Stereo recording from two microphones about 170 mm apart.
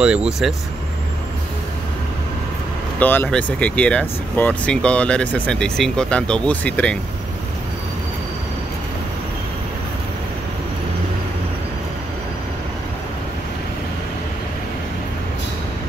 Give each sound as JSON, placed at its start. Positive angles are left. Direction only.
{"t": 0.0, "sound": "speech", "side_deg": -5}
{"t": 3.0, "sound": "speech", "side_deg": 10}